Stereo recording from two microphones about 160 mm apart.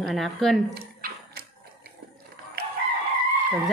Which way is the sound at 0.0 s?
Centre (ahead or behind).